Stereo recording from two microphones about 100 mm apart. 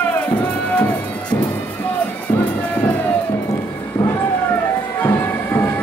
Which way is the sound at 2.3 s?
20° left (ahead or behind).